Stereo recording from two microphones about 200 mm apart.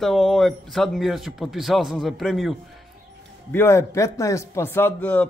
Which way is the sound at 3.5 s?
10° left (ahead or behind).